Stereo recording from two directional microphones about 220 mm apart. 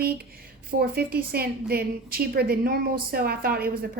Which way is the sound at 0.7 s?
45° right (ahead or behind).